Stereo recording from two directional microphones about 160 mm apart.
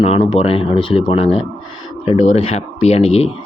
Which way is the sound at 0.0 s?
35° left (ahead or behind).